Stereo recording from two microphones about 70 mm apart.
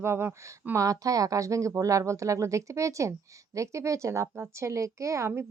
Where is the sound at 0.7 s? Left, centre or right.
Right.